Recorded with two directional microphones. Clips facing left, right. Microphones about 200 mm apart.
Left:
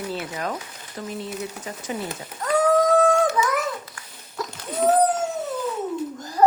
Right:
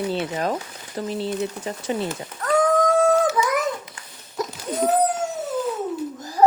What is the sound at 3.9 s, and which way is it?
Dog, 20° right (ahead or behind).